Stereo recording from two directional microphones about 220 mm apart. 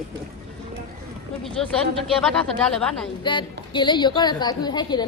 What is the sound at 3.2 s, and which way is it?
A woman's voice, 20° left (ahead or behind).